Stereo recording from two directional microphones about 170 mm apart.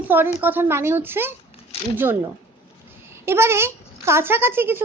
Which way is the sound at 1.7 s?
35° left (ahead or behind).